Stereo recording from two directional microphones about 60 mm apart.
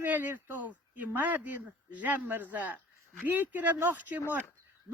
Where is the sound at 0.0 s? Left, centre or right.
Right.